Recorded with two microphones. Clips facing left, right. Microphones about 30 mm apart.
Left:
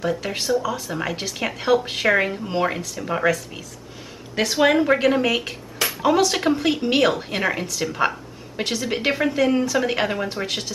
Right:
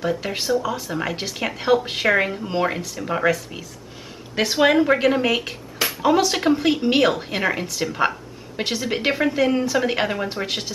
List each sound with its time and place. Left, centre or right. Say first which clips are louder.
0.0 s a woman's voice: even; centre